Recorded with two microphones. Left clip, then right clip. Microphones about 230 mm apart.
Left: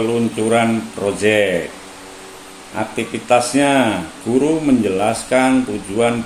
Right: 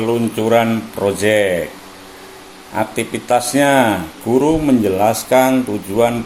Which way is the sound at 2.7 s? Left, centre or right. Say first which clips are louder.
Right 3 dB; right.